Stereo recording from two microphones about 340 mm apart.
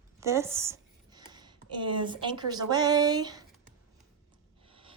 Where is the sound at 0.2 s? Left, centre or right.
Centre.